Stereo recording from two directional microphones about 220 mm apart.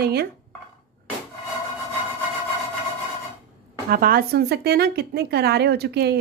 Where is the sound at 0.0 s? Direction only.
45° right (ahead or behind).